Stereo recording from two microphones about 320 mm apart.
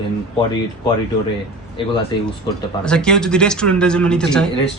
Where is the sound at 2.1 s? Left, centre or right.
Centre.